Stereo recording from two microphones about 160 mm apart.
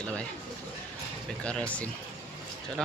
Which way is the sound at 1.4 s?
5° left (ahead or behind).